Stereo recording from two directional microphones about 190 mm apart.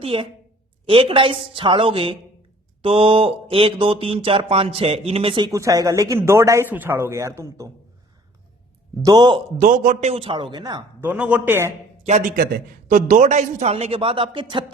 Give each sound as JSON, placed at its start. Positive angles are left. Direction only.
{"t": 0.0, "sound": "mantra", "side_deg": -30}
{"t": 9.0, "sound": "mantra", "side_deg": -25}
{"t": 9.6, "sound": "mantra", "side_deg": -40}
{"t": 11.0, "sound": "speech", "side_deg": -10}
{"t": 12.0, "sound": "a man's voice", "side_deg": -40}